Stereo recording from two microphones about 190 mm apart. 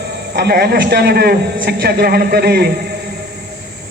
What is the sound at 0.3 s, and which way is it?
A man's voice, 55° right (ahead or behind).